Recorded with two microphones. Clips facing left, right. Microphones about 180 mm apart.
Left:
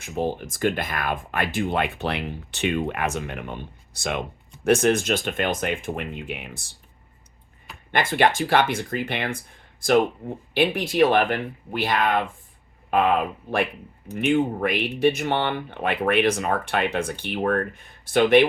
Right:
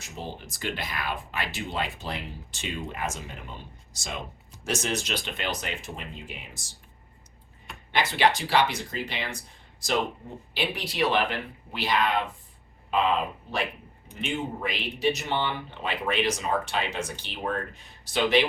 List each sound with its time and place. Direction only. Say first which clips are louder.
0.0 s speech: left 11 dB; 55° left (ahead or behind)
7.9 s speech: left 3 dB; 50° left (ahead or behind)